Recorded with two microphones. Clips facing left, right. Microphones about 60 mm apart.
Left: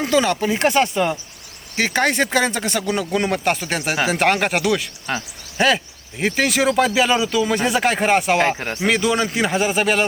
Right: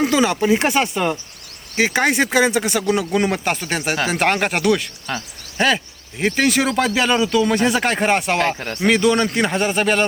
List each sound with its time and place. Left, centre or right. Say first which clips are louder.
0.0 s speech: right 1 dB; centre
5.1 s speech: left 2 dB; left
5.5 s speech: left 1 dB; centre
8.8 s speech: right 3 dB; centre